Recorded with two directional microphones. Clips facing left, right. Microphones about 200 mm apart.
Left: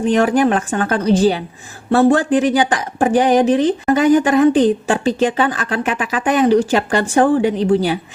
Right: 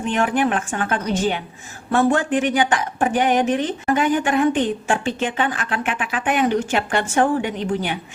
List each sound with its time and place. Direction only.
0.0 s speech: 35° left (ahead or behind)